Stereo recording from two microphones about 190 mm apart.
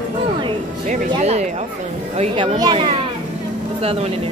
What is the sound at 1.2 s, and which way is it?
A child's voice, 35° right (ahead or behind).